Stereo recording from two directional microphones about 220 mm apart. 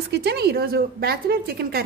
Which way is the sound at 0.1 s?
45° right (ahead or behind).